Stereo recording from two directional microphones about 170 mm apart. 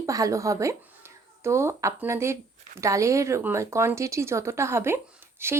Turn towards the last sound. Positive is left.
turn(degrees=-15)  # may be behind; listen again after turning